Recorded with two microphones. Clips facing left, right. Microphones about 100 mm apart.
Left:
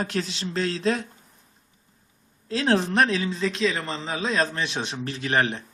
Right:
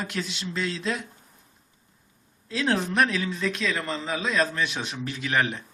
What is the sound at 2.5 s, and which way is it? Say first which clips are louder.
Speech: left 3 dB; 35° left (ahead or behind).